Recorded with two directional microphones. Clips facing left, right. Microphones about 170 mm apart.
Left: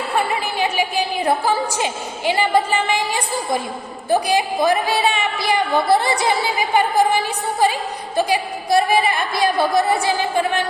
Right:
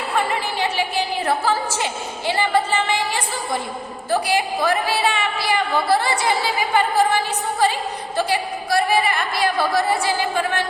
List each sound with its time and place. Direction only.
0.6 s a woman's voice: 15° left (ahead or behind)